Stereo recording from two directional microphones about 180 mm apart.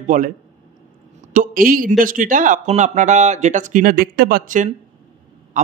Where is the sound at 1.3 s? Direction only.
50° right (ahead or behind).